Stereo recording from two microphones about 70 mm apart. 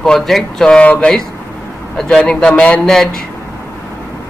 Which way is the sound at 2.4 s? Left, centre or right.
Centre.